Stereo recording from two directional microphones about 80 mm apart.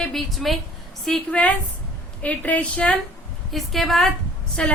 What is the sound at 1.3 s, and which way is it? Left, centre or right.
A woman's voice, centre.